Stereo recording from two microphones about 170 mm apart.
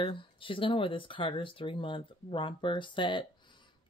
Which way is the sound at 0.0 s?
30° left (ahead or behind).